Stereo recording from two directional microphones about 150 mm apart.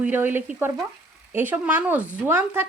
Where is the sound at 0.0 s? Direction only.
10° right (ahead or behind).